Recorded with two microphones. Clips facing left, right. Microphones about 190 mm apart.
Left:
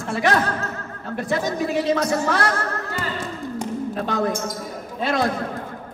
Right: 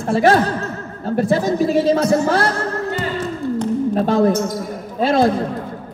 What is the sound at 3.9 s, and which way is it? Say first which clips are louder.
A woman's voice: right 9 dB; 30° right (ahead or behind).